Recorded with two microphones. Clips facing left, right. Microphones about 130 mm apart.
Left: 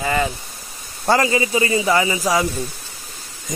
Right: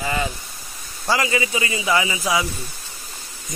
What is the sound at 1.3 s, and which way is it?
A man's voice, 35° left (ahead or behind).